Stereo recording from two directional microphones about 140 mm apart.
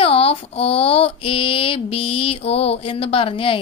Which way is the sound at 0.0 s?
45° left (ahead or behind).